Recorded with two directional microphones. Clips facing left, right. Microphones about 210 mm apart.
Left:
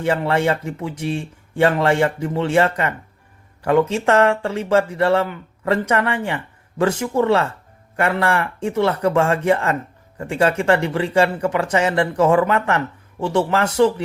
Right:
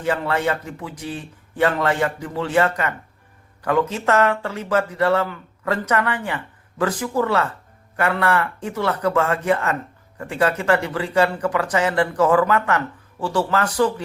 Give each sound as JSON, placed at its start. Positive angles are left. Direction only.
{"t": 0.0, "sound": "speech", "side_deg": 25}